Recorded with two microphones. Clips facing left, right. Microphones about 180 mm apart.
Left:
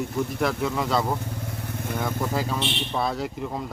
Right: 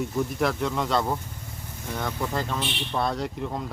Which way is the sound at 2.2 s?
5° left (ahead or behind).